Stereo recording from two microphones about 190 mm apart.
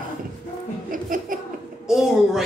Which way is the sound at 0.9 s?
45° right (ahead or behind).